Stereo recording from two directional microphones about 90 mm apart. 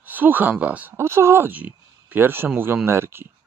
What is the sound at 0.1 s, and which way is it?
Speech, 20° right (ahead or behind).